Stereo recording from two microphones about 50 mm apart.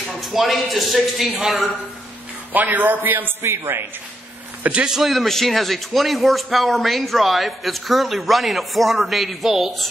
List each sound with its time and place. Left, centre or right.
0.2 s speech: centre
2.5 s a man's voice: right
3.4 s a man's voice: right
4.8 s a man's voice: centre
5.1 s speech: centre